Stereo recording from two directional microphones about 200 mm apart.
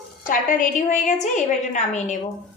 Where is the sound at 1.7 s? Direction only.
35° left (ahead or behind).